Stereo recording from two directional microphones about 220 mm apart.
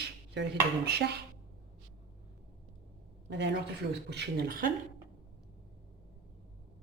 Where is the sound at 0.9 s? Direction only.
45° right (ahead or behind).